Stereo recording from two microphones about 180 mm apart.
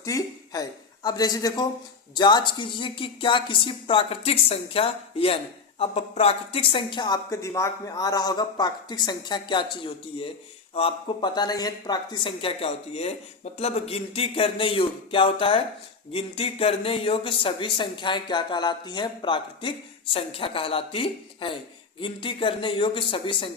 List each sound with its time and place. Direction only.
0.0 s speech: 20° left (ahead or behind)